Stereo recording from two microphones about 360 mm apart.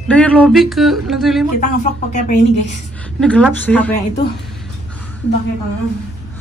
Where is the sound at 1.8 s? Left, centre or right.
Centre.